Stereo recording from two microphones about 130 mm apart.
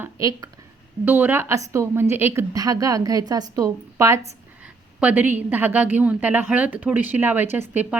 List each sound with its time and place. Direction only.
0.0 s speech: 25° right (ahead or behind)
1.0 s a woman's voice: 15° right (ahead or behind)
4.6 s a woman's voice: 10° right (ahead or behind)